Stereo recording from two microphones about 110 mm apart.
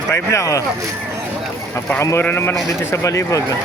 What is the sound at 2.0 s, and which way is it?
Speech, 25° left (ahead or behind).